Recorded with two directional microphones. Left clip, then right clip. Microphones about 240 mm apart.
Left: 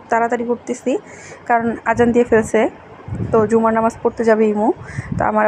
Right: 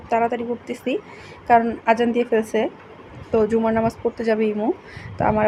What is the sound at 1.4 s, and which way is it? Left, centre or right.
Speech, centre.